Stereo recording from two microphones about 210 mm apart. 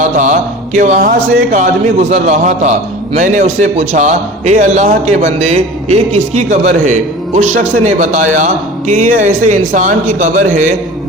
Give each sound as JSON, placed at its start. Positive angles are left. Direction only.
{"t": 0.0, "sound": "a man's voice", "side_deg": -35}